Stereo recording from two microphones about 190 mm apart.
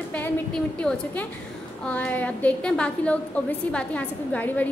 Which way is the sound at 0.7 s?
5° left (ahead or behind).